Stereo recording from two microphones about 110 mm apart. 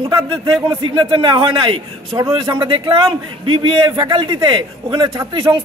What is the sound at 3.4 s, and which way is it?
A man's voice, 50° right (ahead or behind).